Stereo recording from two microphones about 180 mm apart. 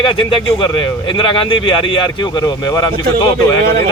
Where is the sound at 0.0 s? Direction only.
30° left (ahead or behind).